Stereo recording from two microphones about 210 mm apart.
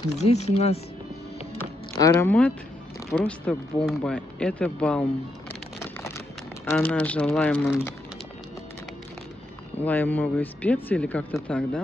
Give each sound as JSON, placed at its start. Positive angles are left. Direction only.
{"t": 0.2, "sound": "speech", "side_deg": 30}
{"t": 2.0, "sound": "speech", "side_deg": 15}
{"t": 5.8, "sound": "a sound", "side_deg": 10}
{"t": 9.8, "sound": "speech", "side_deg": 10}